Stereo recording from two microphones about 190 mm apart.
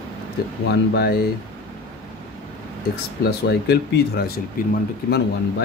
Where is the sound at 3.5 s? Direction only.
60° left (ahead or behind).